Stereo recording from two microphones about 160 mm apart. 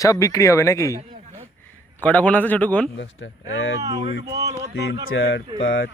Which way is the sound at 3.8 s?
25° right (ahead or behind).